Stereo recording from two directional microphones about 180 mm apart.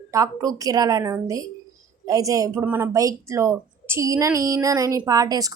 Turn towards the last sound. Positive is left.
turn(degrees=-20)  # may be behind; listen again after turning